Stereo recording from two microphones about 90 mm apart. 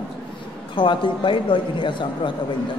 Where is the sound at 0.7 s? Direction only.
70° left (ahead or behind).